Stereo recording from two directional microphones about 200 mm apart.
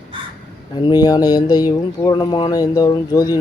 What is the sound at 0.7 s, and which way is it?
Speech, 20° left (ahead or behind).